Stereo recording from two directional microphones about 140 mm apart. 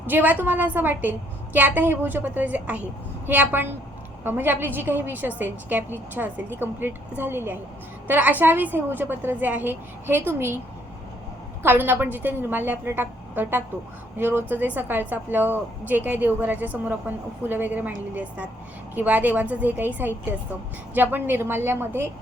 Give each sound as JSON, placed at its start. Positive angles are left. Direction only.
{"t": 0.0, "sound": "a woman's voice", "side_deg": -15}
{"t": 11.6, "sound": "a woman's voice", "side_deg": -15}